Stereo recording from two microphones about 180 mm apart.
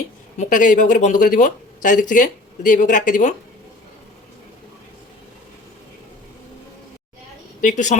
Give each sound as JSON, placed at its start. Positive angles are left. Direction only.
{"t": 0.3, "sound": "speech", "side_deg": 45}
{"t": 7.6, "sound": "speech", "side_deg": 45}